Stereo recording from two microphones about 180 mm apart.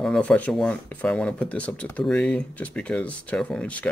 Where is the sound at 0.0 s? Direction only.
5° left (ahead or behind).